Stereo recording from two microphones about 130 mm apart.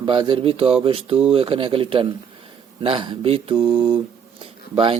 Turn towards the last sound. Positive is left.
turn(degrees=-40)  # may be behind; listen again after turning